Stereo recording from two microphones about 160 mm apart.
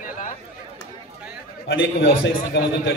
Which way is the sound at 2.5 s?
90° left.